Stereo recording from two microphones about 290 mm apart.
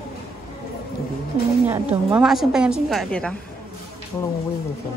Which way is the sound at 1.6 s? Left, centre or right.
Centre.